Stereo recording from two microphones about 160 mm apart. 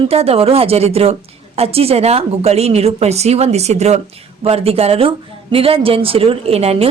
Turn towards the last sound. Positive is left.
turn(degrees=-40)  # may be behind; listen again after turning